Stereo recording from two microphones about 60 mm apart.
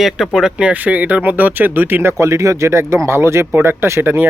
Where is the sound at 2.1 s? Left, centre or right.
Right.